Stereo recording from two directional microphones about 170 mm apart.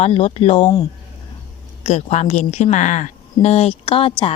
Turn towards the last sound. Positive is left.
turn(degrees=30)  # may be behind; listen again after turning